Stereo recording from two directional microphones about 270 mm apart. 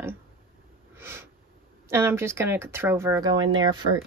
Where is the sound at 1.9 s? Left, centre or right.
Centre.